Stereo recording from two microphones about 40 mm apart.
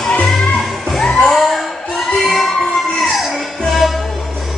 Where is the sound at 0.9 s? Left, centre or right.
Centre.